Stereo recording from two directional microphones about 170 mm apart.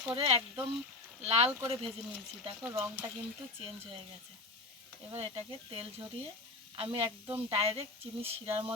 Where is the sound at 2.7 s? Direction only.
10° right (ahead or behind).